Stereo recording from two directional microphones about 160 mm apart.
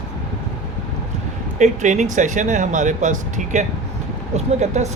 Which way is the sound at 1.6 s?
50° right (ahead or behind).